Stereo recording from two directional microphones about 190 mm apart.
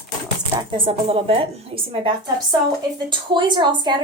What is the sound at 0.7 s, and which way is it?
Speech, 30° right (ahead or behind).